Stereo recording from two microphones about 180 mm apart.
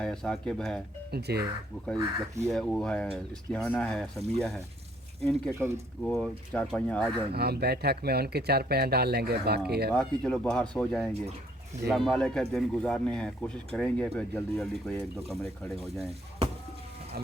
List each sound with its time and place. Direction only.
0.0 s speech: 5° left (ahead or behind)
1.1 s speech: 60° right (ahead or behind)
2.4 s speech: 5° left (ahead or behind)
5.5 s speech: 15° right (ahead or behind)
6.0 s speech: 5° left (ahead or behind)
7.3 s speech: 60° right (ahead or behind)
9.9 s speech: 5° left (ahead or behind)